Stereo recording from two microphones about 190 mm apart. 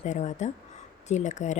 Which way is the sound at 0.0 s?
40° left (ahead or behind).